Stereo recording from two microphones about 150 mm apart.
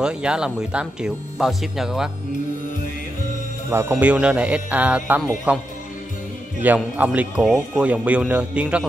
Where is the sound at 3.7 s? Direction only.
15° right (ahead or behind).